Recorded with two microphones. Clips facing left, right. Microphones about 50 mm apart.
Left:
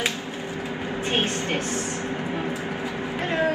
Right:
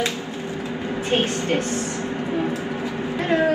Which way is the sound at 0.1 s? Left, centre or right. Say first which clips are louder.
Right 2 dB; right.